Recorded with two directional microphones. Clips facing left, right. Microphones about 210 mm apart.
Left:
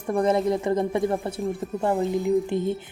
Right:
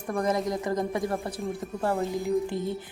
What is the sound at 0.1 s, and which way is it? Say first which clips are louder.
Speech: left 5 dB; 30° left (ahead or behind).